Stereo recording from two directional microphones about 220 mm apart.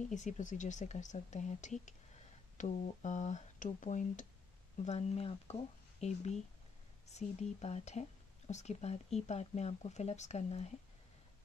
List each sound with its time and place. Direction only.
0.1 s speech: 35° left (ahead or behind)